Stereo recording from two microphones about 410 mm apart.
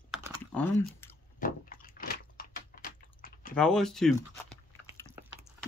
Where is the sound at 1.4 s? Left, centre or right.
Centre.